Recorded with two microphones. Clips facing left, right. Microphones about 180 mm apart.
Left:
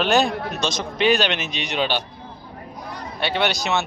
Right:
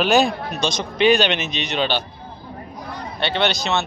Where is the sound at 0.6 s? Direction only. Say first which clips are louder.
Right 4 dB; 5° left (ahead or behind).